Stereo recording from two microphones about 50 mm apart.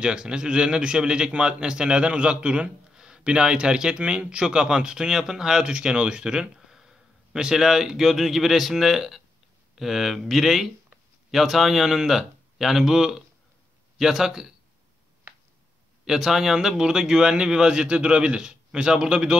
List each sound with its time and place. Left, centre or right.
0.0 s a man's voice: centre
16.1 s a man's voice: centre